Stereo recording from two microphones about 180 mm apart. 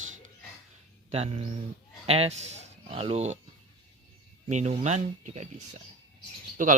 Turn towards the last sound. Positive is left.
turn(degrees=-45)  # may be behind; listen again after turning